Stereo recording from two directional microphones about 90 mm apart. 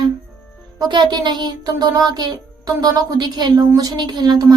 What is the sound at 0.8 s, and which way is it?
Child singing, 55° right (ahead or behind).